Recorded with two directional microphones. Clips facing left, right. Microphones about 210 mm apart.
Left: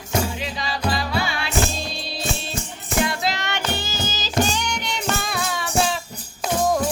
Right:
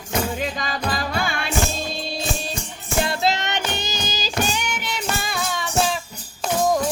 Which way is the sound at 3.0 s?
25° right (ahead or behind).